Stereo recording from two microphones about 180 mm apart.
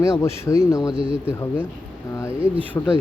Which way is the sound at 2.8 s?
15° left (ahead or behind).